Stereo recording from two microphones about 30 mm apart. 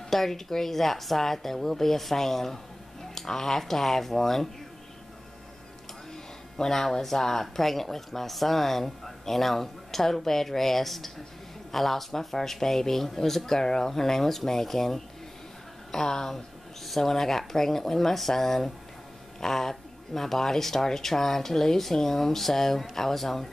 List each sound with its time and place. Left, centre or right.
0.1 s speech: centre
6.6 s speech: centre
15.9 s speech: left
16.8 s speech: centre